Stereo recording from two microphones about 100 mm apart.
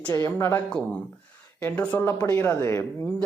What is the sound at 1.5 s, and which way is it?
Speech, 15° left (ahead or behind).